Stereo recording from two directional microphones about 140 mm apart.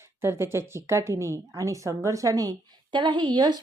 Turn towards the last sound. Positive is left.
turn(degrees=-30)  # may be behind; listen again after turning